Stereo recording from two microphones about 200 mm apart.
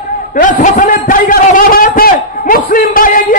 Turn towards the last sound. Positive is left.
turn(degrees=45)  # may be behind; listen again after turning